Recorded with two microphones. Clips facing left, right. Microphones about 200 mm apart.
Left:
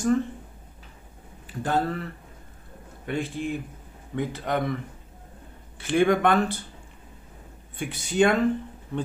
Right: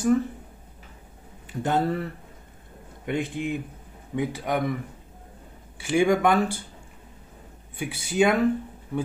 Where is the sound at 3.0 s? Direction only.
20° right (ahead or behind).